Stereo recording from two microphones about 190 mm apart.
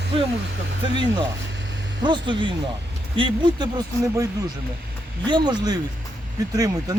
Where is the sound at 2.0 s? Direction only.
25° right (ahead or behind).